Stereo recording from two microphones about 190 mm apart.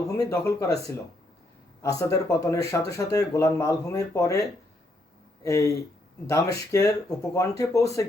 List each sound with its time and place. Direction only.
0.2 s speech: 15° left (ahead or behind)